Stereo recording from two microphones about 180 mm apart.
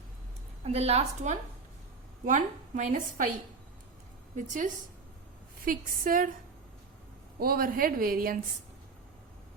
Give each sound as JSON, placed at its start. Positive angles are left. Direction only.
{"t": 0.6, "sound": "a woman's voice", "side_deg": -35}
{"t": 4.4, "sound": "a woman's voice", "side_deg": -45}
{"t": 7.3, "sound": "a woman's voice", "side_deg": -55}